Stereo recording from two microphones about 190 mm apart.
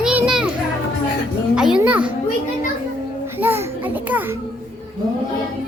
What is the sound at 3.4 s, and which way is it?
Speech, 10° right (ahead or behind).